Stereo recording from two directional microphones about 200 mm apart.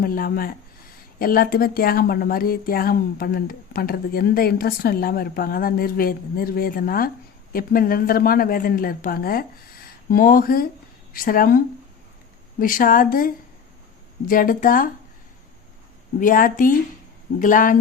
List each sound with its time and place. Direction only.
0.0 s speech: 45° left (ahead or behind)
16.2 s speech: 45° left (ahead or behind)